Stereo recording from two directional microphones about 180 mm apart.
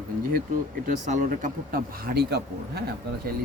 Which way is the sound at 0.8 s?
45° right (ahead or behind).